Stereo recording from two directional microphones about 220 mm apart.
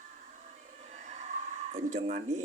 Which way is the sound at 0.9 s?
35° right (ahead or behind).